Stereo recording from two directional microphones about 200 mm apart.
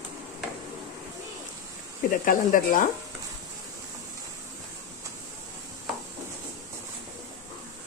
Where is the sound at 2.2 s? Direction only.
45° left (ahead or behind).